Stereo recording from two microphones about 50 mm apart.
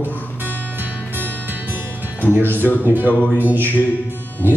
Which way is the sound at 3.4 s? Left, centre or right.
Right.